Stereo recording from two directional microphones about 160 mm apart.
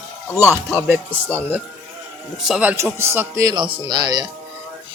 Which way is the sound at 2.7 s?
15° right (ahead or behind).